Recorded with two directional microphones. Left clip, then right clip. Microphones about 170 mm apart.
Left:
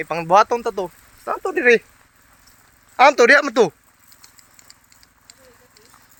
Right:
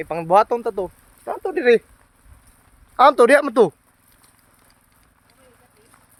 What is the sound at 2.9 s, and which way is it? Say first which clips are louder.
Speech: left 1 dB; 20° right (ahead or behind).